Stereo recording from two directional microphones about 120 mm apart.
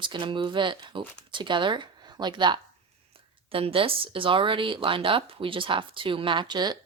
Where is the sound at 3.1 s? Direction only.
50° right (ahead or behind).